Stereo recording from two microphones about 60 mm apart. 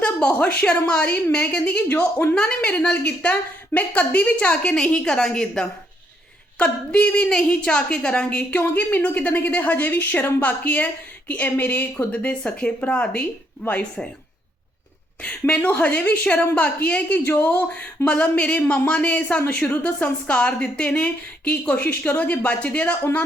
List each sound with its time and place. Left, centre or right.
0.0 s a sound: left
0.6 s a woman's voice: centre
12.2 s a woman's voice: centre
15.2 s a woman's voice: centre